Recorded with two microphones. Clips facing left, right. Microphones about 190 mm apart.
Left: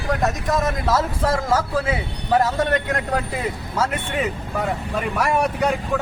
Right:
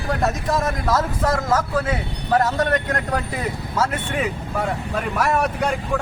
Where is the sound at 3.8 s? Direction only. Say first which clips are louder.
Even; 5° right (ahead or behind).